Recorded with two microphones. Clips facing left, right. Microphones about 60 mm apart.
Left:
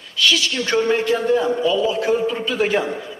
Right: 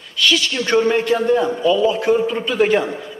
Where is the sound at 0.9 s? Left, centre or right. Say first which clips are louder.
Right 1 dB; centre.